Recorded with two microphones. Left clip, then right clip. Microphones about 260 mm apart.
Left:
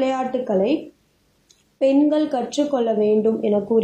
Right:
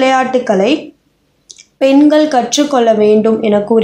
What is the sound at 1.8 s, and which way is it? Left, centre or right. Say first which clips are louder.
Speech: right 9 dB; right.